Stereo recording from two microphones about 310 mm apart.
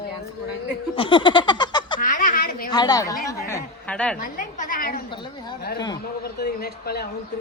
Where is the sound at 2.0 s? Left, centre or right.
Left.